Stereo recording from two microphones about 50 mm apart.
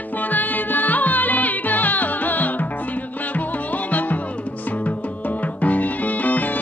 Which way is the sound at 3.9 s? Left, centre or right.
Left.